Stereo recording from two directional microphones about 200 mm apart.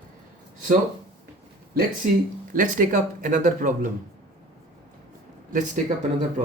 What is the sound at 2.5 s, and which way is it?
Speech, 40° right (ahead or behind).